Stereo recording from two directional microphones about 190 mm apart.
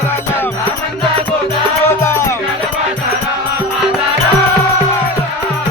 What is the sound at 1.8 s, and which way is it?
Music, 15° left (ahead or behind).